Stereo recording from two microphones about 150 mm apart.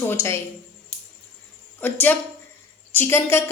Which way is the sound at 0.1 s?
15° left (ahead or behind).